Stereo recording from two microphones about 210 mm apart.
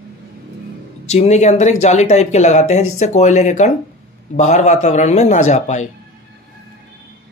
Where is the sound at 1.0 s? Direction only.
30° left (ahead or behind).